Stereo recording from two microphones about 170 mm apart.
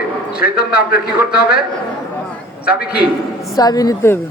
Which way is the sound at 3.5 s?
20° left (ahead or behind).